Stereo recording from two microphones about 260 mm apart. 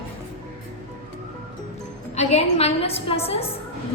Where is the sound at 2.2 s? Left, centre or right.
Left.